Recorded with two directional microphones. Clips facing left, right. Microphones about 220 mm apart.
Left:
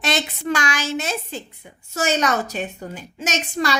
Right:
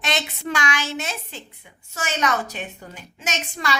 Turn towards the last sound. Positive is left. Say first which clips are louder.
# left 5 dB
turn(degrees=40)  # may be behind; listen again after turning